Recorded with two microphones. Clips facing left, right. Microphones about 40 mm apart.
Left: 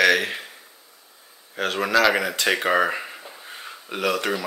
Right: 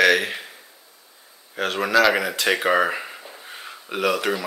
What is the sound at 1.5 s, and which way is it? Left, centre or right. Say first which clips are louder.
Speech: right 1 dB; centre.